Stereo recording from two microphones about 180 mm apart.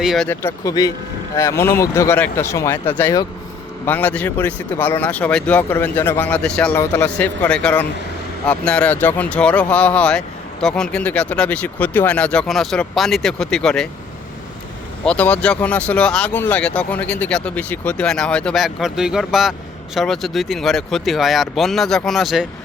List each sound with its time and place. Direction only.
0.0 s speech: centre (ahead or behind)
0.3 s speech: 15° left (ahead or behind)
15.0 s speech: 5° left (ahead or behind)